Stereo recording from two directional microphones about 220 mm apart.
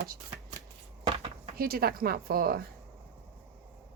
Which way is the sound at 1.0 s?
25° right (ahead or behind).